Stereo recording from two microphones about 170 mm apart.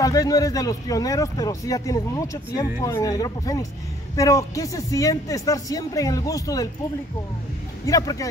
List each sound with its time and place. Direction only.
0.0 s speech: 20° left (ahead or behind)
7.8 s speech: 20° left (ahead or behind)